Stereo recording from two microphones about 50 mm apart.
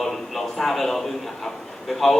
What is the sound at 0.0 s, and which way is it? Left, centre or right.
A man's voice, centre.